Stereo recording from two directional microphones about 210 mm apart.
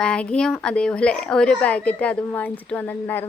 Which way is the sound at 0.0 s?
5° left (ahead or behind).